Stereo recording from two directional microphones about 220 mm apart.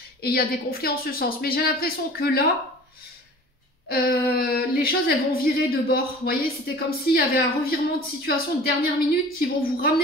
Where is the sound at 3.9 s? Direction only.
45° left (ahead or behind).